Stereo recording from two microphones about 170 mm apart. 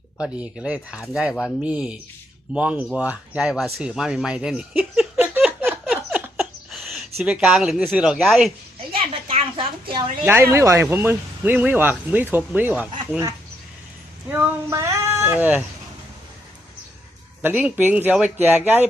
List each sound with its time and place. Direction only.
0.2 s speech: 5° right (ahead or behind)
6.2 s a sound: 5° right (ahead or behind)
9.3 s a sound: 30° right (ahead or behind)
10.2 s speech: 15° right (ahead or behind)
14.3 s speech: 15° right (ahead or behind)
17.4 s speech: 10° right (ahead or behind)